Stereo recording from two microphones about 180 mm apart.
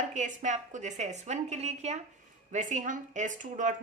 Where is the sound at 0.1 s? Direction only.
40° right (ahead or behind).